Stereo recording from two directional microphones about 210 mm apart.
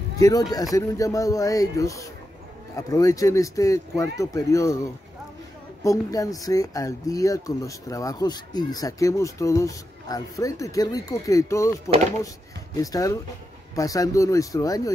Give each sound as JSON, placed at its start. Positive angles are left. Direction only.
{"t": 0.2, "sound": "speech", "side_deg": 15}
{"t": 5.9, "sound": "speech", "side_deg": 15}
{"t": 12.7, "sound": "speech", "side_deg": 15}